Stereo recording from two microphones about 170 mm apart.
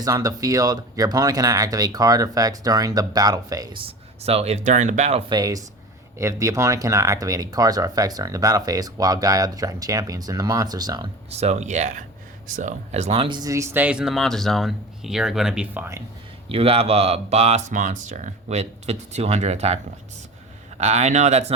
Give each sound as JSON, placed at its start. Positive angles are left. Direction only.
{"t": 0.0, "sound": "speech", "side_deg": -20}
{"t": 5.3, "sound": "speech", "side_deg": -20}
{"t": 11.3, "sound": "speech", "side_deg": -40}
{"t": 16.5, "sound": "speech", "side_deg": -35}